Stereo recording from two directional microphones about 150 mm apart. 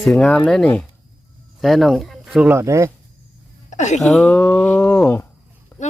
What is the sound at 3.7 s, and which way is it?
Speech, 50° left (ahead or behind).